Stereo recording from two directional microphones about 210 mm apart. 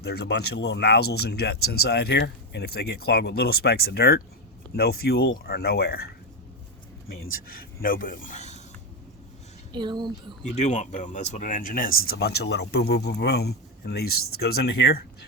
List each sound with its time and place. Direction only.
0.0 s speech: 50° left (ahead or behind)
7.8 s speech: 40° left (ahead or behind)
9.7 s speech: 20° right (ahead or behind)
10.5 s speech: 35° left (ahead or behind); by 15.0 s 50° left (ahead or behind)